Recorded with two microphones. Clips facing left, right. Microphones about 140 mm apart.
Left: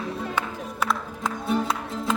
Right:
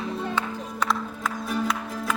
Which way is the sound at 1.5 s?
25° left (ahead or behind).